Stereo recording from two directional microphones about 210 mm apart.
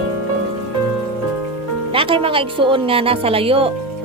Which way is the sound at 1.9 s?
25° right (ahead or behind).